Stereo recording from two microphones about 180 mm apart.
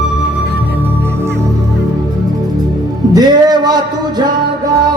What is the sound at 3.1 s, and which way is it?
Music, 20° right (ahead or behind).